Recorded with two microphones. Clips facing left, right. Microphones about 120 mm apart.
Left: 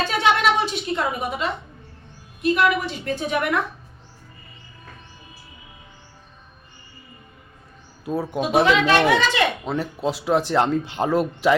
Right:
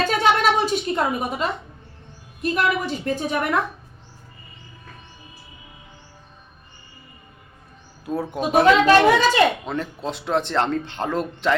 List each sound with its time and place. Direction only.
0.2 s a sound: 45° right (ahead or behind)
2.4 s speech: 40° right (ahead or behind)
8.0 s speech: centre (ahead or behind)
8.4 s speech: 40° right (ahead or behind)
9.6 s speech: 5° left (ahead or behind)